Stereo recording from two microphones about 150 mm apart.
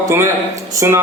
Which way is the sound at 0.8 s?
20° right (ahead or behind).